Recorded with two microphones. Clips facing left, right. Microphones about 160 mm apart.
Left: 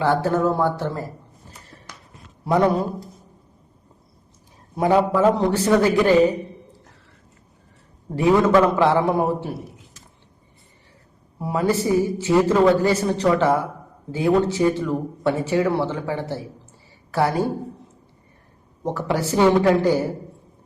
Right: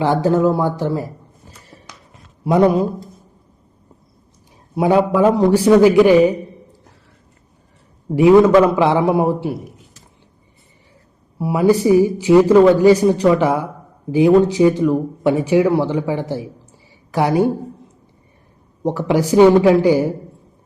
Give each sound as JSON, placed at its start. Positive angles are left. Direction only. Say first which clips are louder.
{"t": 0.0, "sound": "speech", "louder": "right 4 dB", "side_deg": -15}
{"t": 2.4, "sound": "a man's voice", "louder": "right 5 dB", "side_deg": -10}
{"t": 4.7, "sound": "speech", "louder": "right 3 dB", "side_deg": -10}
{"t": 8.1, "sound": "speech", "louder": "right 7 dB", "side_deg": -10}
{"t": 11.3, "sound": "a woman's voice", "louder": "right 7 dB", "side_deg": -10}
{"t": 18.8, "sound": "speech", "louder": "right 6 dB", "side_deg": -15}